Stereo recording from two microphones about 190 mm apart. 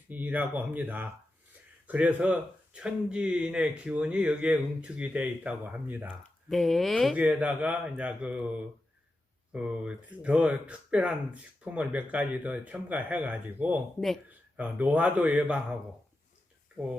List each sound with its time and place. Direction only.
0.1 s speech: 10° right (ahead or behind)